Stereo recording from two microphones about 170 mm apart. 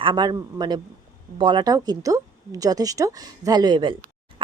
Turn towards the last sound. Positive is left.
turn(degrees=-25)  # may be behind; listen again after turning